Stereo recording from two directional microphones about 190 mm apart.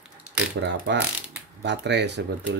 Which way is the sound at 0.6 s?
65° right (ahead or behind).